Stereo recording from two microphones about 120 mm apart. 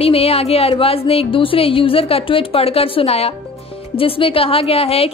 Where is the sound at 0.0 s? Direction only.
55° left (ahead or behind).